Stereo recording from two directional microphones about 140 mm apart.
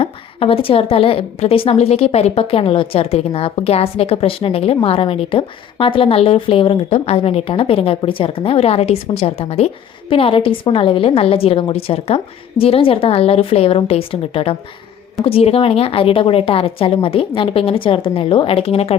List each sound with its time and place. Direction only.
0.0 s a woman's voice: 40° left (ahead or behind)